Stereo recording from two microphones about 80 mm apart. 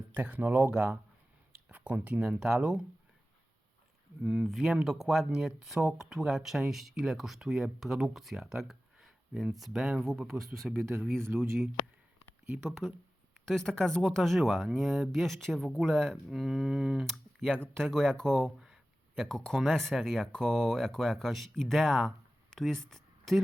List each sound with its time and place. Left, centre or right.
0.1 s speech: right
4.2 s speech: centre
11.8 s a sound: left
12.5 s speech: centre
17.5 s speech: centre
22.5 s a sound: centre